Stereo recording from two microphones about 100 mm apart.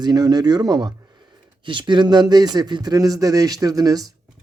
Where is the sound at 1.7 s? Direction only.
50° right (ahead or behind).